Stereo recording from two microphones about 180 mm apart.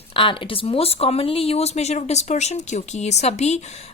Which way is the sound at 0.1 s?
30° left (ahead or behind).